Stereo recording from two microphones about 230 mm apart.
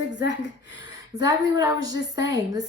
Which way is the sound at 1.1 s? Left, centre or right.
Centre.